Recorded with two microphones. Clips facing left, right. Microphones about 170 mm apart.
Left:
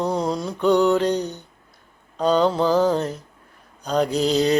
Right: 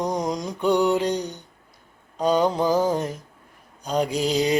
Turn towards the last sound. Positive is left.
turn(degrees=-10)  # may be behind; listen again after turning